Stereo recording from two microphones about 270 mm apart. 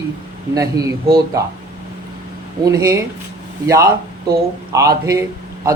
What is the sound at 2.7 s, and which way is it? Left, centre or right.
Speech, centre.